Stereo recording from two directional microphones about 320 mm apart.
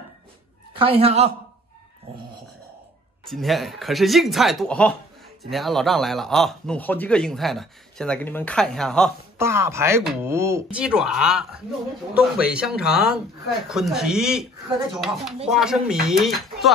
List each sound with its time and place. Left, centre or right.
0.7 s speech: centre
3.3 s speech: centre